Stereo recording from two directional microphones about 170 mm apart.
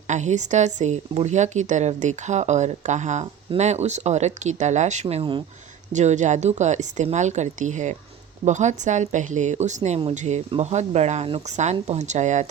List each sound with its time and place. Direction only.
0.1 s speech: 45° right (ahead or behind)